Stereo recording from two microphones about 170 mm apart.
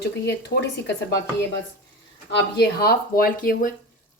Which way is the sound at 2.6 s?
65° left (ahead or behind).